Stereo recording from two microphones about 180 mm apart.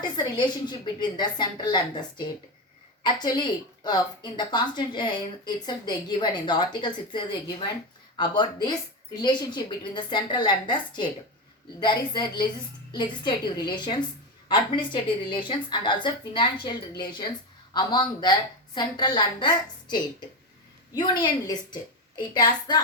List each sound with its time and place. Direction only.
0.0 s a woman's voice: 25° left (ahead or behind)